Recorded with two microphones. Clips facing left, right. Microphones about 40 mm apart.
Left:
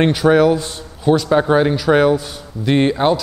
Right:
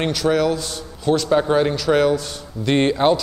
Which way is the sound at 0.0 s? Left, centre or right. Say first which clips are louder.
Left 6 dB; left.